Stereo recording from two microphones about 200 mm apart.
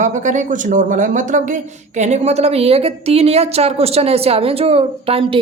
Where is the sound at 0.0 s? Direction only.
40° right (ahead or behind).